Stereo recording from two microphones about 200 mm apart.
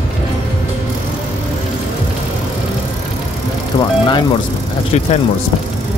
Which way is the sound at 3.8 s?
25° left (ahead or behind).